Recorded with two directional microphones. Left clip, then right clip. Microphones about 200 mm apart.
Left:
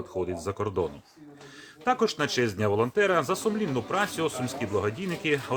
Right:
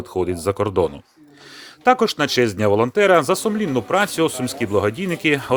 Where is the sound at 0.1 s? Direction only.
45° right (ahead or behind).